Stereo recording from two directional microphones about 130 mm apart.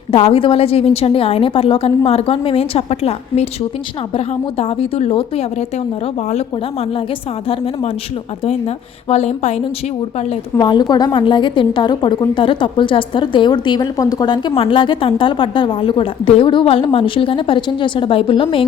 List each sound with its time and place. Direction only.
0.1 s a woman's voice: 50° left (ahead or behind)
9.0 s a woman's voice: 55° left (ahead or behind)
10.6 s a woman's voice: 35° left (ahead or behind)